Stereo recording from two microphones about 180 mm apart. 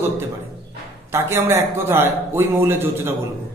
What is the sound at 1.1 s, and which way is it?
A man's voice, 15° right (ahead or behind).